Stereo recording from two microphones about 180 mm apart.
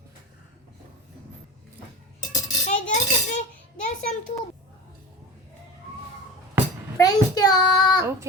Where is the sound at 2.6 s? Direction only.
40° left (ahead or behind).